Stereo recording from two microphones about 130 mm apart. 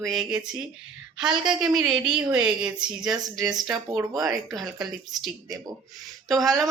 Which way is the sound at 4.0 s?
25° right (ahead or behind).